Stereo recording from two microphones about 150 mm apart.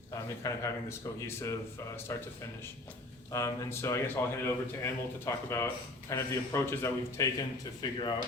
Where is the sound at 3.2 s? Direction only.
20° left (ahead or behind).